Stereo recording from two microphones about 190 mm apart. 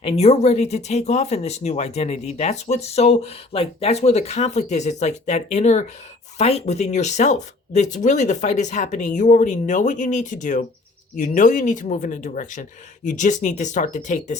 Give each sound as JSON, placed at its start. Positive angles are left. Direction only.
{"t": 0.0, "sound": "speech", "side_deg": 35}